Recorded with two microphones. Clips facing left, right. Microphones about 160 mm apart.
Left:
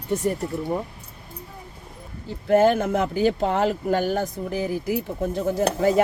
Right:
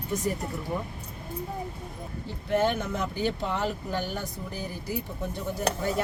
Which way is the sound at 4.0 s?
50° left (ahead or behind).